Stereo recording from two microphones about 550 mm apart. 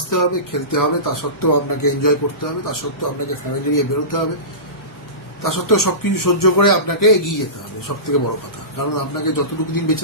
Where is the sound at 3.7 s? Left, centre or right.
Left.